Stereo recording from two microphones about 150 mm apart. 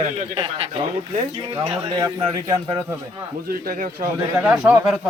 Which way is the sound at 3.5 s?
70° right (ahead or behind).